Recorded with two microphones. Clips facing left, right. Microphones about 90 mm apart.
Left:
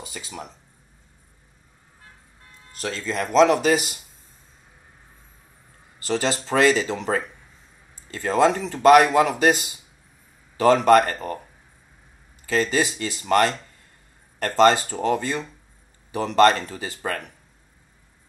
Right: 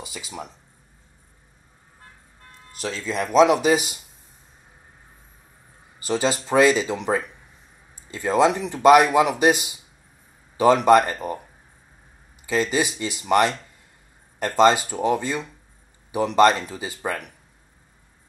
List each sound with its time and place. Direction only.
0.0 s speech: 5° right (ahead or behind)
3.1 s speech: 10° right (ahead or behind)
5.9 s speech: 15° right (ahead or behind)
12.4 s speech: 15° right (ahead or behind)